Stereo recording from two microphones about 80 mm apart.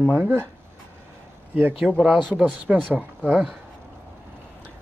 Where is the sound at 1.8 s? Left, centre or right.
Centre.